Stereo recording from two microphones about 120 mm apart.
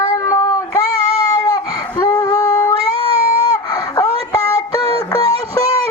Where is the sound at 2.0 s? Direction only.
35° left (ahead or behind).